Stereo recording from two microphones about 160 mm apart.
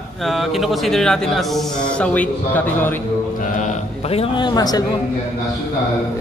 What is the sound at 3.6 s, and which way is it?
A man's voice, 40° left (ahead or behind).